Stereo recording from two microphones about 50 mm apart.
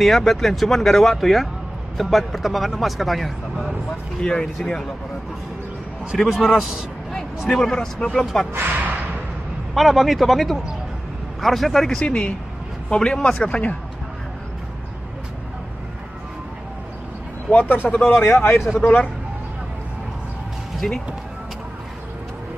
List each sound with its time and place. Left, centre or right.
0.0 s speech: centre
4.2 s speech: centre
6.3 s a man's voice: centre
7.4 s speech: centre
8.5 s a sound: right
9.8 s speech: centre
12.0 s speech: left
17.5 s a man's voice: left
18.8 s speech: left
20.8 s speech: centre